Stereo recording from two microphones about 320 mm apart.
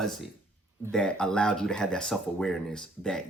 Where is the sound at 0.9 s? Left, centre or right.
Centre.